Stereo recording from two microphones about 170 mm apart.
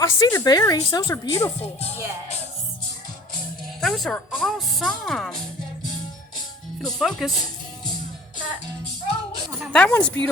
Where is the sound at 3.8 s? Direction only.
Centre (ahead or behind).